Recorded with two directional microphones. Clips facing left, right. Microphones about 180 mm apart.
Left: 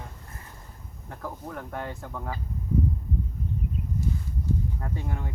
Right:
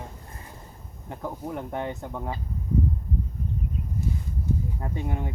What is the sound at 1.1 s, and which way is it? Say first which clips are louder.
Speech: right 4 dB; 20° right (ahead or behind).